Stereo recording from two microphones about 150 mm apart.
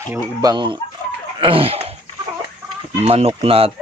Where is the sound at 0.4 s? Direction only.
30° right (ahead or behind).